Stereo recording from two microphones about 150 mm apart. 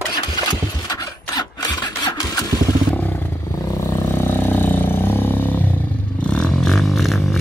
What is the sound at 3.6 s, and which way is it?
Vehicle, 20° left (ahead or behind).